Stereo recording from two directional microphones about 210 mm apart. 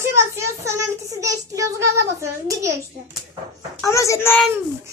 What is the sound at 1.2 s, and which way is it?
Child singing, 15° right (ahead or behind).